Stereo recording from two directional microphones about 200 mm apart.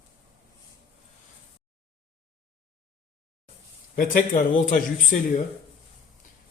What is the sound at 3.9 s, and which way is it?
Speech, 40° left (ahead or behind).